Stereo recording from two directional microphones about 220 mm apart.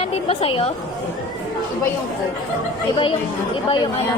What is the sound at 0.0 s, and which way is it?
Speech, 25° left (ahead or behind).